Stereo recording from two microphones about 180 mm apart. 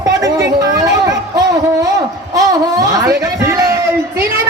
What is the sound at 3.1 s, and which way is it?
A man's voice, 15° right (ahead or behind).